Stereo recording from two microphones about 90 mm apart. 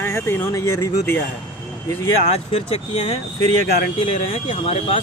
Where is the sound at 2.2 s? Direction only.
90° left.